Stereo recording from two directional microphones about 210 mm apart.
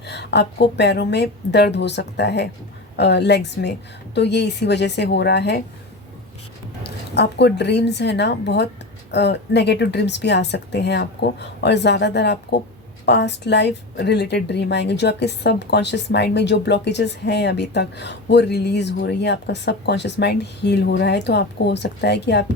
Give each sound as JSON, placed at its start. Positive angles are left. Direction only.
{"t": 0.0, "sound": "a woman's voice", "side_deg": 55}
{"t": 6.8, "sound": "a woman's voice", "side_deg": 50}